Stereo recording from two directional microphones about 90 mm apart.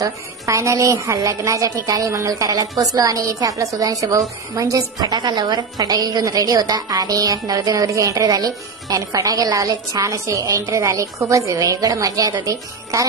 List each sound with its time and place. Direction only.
0.0 s a woman's voice: 35° right (ahead or behind)